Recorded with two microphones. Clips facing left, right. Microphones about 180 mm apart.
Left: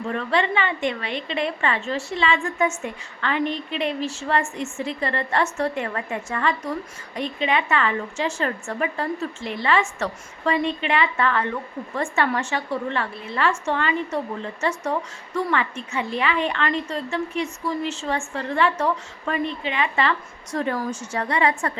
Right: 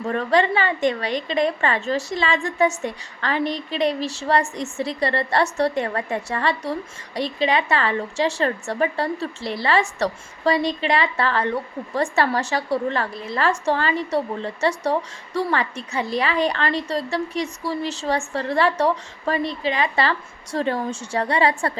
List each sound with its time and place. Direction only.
0.0 s a woman's voice: 40° right (ahead or behind)